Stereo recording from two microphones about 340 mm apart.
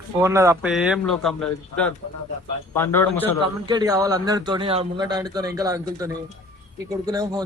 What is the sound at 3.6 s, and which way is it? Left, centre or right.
A man's voice, centre.